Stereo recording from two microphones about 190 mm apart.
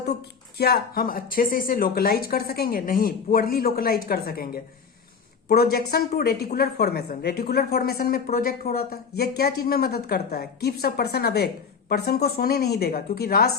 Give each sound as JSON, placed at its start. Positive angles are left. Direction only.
{"t": 0.5, "sound": "a woman's voice", "side_deg": 55}